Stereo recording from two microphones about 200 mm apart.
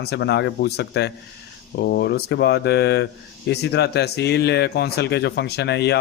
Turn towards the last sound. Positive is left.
turn(degrees=55)  # may be behind; listen again after turning